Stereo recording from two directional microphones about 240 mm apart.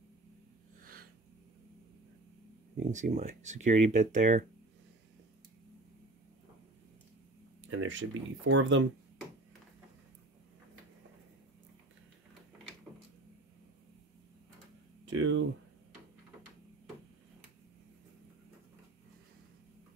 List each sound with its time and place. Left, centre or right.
2.8 s speech: right
7.6 s speech: right
15.0 s speech: right